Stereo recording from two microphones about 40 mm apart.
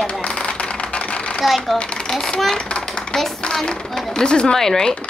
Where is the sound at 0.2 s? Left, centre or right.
Left.